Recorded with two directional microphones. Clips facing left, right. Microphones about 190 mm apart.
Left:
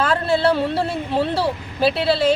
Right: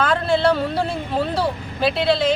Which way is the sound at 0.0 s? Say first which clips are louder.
Even; 5° left (ahead or behind).